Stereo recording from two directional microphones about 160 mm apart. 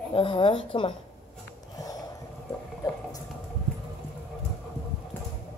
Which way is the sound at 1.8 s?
25° left (ahead or behind).